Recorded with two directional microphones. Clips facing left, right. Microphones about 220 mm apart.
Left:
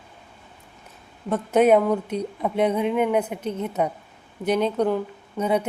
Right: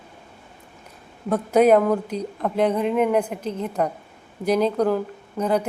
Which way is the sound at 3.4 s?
30° right (ahead or behind).